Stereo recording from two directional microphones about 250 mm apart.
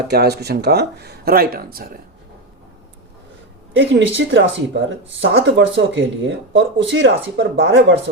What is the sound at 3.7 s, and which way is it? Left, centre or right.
Speech, right.